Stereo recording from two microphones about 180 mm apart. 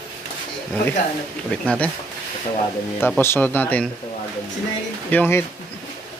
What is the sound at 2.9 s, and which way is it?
Speech, 10° left (ahead or behind).